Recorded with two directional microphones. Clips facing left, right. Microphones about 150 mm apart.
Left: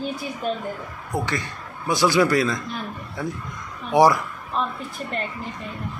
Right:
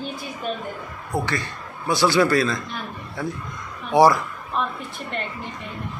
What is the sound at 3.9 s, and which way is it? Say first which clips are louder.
Speech: right 1 dB; 15° left (ahead or behind).